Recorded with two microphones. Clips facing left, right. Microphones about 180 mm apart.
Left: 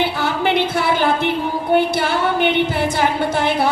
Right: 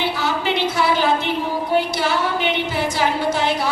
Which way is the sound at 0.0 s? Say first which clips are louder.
Left 3 dB; 55° left (ahead or behind).